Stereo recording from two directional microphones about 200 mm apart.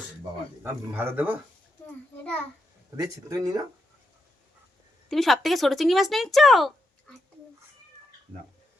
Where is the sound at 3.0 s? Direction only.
15° right (ahead or behind).